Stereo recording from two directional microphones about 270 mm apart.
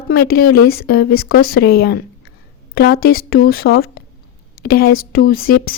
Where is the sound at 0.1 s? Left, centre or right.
Left.